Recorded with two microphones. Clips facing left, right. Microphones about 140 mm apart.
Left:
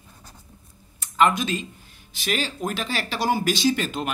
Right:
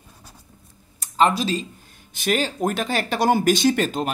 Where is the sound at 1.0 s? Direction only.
35° right (ahead or behind).